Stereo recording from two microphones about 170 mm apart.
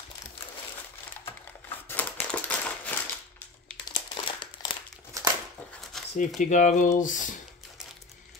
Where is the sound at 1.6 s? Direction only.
10° left (ahead or behind).